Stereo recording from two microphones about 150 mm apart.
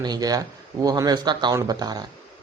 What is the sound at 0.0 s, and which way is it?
Speech, 25° right (ahead or behind).